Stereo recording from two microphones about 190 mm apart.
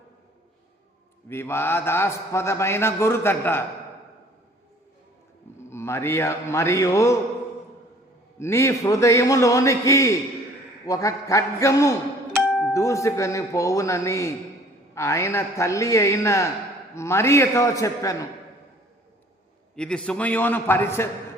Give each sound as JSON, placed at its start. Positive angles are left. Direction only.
{"t": 1.3, "sound": "a man's voice", "side_deg": 15}
{"t": 5.5, "sound": "a man's voice", "side_deg": 15}
{"t": 8.4, "sound": "a man's voice", "side_deg": 15}
{"t": 12.3, "sound": "music", "side_deg": 0}
{"t": 12.7, "sound": "a man's voice", "side_deg": 15}
{"t": 19.7, "sound": "a man's voice", "side_deg": 5}